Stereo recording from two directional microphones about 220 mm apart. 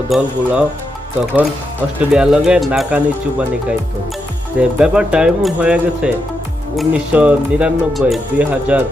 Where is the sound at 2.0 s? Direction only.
5° right (ahead or behind).